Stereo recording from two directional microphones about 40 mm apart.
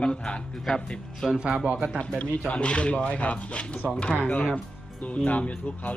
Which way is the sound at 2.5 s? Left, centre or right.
Left.